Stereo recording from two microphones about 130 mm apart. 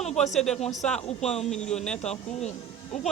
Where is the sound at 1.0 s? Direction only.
55° left (ahead or behind).